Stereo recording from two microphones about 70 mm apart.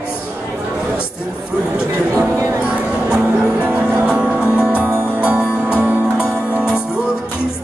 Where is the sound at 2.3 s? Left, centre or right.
Right.